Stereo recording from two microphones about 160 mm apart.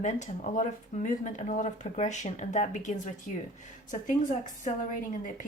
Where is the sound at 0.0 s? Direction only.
50° left (ahead or behind).